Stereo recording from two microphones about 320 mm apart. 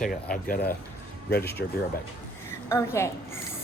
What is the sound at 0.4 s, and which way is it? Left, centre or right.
Speech, left.